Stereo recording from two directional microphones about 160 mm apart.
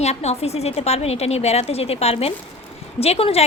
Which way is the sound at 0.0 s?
45° left (ahead or behind).